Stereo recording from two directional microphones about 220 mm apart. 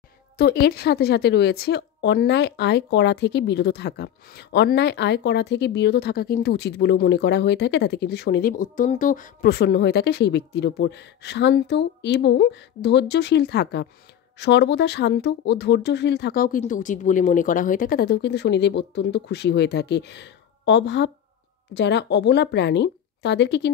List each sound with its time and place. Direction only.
0.4 s a woman's voice: 45° left (ahead or behind)